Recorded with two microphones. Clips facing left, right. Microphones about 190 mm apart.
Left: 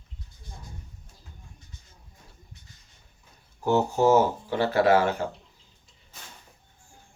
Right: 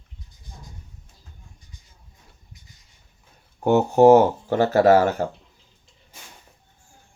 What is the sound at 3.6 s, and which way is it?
Speech, 60° right (ahead or behind).